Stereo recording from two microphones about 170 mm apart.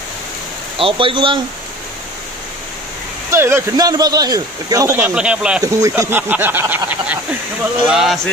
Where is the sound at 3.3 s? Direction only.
15° right (ahead or behind).